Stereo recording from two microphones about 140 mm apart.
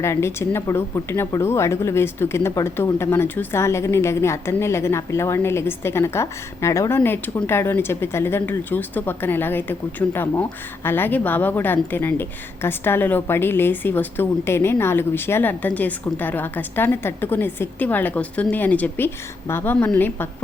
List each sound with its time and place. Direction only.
0.0 s a woman's voice: 20° left (ahead or behind)